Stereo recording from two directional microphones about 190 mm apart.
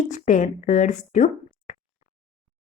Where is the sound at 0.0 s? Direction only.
40° left (ahead or behind).